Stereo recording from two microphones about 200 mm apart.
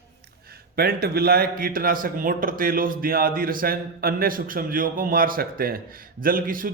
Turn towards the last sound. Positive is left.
turn(degrees=-45)  # may be behind; listen again after turning